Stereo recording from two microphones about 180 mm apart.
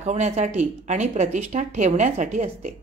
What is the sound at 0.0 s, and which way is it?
A woman's voice, 40° right (ahead or behind).